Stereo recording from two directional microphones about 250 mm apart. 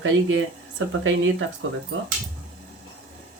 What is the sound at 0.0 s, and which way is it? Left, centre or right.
Speech, right.